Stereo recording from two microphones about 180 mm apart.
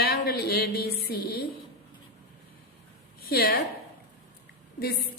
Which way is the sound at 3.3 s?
60° left (ahead or behind).